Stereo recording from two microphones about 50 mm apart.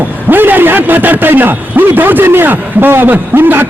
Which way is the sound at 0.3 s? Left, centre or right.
Right.